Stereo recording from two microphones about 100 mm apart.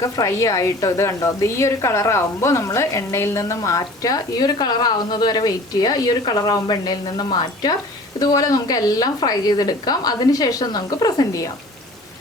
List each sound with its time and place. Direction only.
0.0 s a woman's voice: 35° left (ahead or behind)